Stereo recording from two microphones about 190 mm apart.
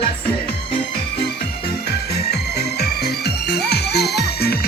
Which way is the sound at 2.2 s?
60° left (ahead or behind).